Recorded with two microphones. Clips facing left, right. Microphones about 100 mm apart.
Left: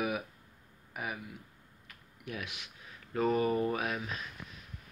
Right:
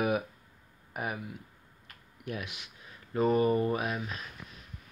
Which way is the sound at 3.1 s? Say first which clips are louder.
Right 3 dB; 25° right (ahead or behind).